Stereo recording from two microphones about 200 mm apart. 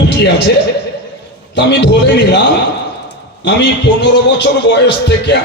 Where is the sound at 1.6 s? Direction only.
55° left (ahead or behind).